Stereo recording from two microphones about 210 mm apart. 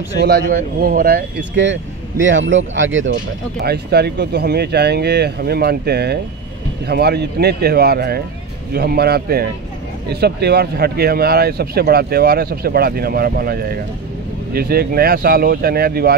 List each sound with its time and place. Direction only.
0.2 s speech: 50° right (ahead or behind)
3.6 s speech: 50° right (ahead or behind)